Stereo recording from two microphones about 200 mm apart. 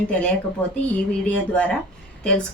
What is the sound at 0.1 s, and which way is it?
A woman's voice, 5° left (ahead or behind).